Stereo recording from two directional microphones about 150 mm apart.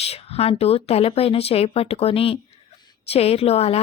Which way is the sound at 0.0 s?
40° left (ahead or behind).